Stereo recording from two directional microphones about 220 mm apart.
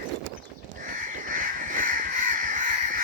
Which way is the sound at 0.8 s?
35° right (ahead or behind).